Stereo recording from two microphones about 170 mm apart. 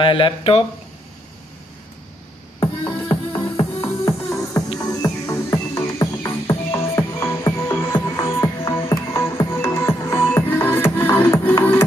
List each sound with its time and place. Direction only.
0.0 s speech: 30° left (ahead or behind)
2.6 s music: 30° left (ahead or behind)
4.0 s music: 20° left (ahead or behind)